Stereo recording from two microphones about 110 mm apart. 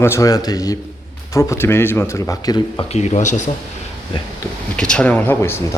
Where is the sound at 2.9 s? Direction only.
90° left.